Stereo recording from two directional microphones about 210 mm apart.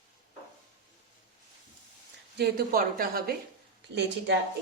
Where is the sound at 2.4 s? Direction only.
45° right (ahead or behind).